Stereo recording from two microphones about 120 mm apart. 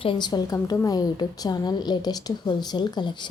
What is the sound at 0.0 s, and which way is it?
A woman's voice, 40° left (ahead or behind).